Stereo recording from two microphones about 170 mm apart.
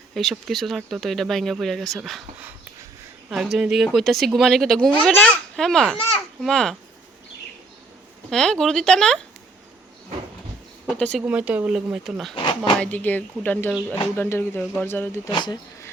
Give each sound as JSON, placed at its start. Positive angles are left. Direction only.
{"t": 0.1, "sound": "speech", "side_deg": 0}
{"t": 8.3, "sound": "speech", "side_deg": 5}
{"t": 10.8, "sound": "speech", "side_deg": 5}
{"t": 11.2, "sound": "speech", "side_deg": -5}
{"t": 12.3, "sound": "speech", "side_deg": 30}
{"t": 12.8, "sound": "speech", "side_deg": 10}
{"t": 15.3, "sound": "speech", "side_deg": 25}